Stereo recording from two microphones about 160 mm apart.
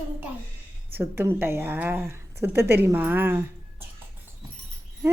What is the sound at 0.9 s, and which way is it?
A woman's voice, 15° right (ahead or behind).